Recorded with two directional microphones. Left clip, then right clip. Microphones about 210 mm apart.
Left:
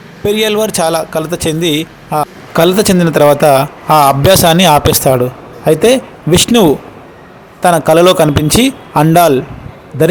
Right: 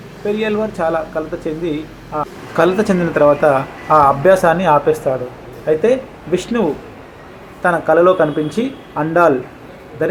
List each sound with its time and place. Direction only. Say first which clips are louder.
0.3 s a man's voice: left 7 dB; 50° left (ahead or behind)